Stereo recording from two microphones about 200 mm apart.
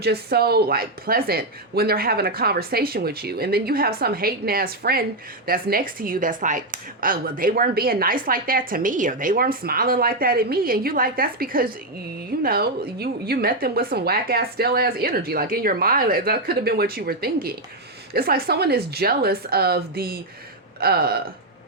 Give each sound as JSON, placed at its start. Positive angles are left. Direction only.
{"t": 0.0, "sound": "speech", "side_deg": -50}